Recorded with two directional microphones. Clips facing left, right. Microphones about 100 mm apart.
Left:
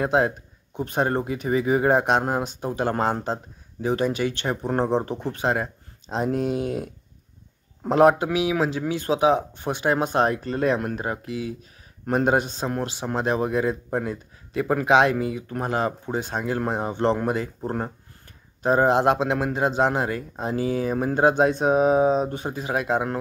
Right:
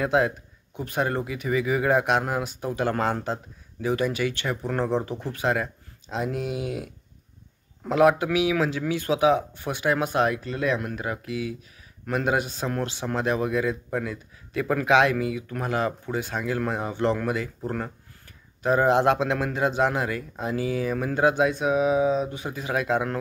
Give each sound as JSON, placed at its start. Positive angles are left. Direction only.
{"t": 0.0, "sound": "a man's voice", "side_deg": 30}